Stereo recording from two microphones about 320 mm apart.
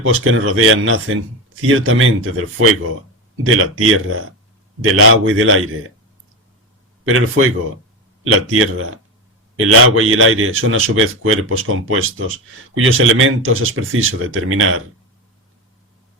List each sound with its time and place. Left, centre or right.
0.0 s a man's voice: right
7.0 s a man's voice: right